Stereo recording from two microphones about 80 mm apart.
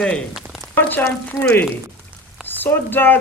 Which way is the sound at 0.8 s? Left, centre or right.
Left.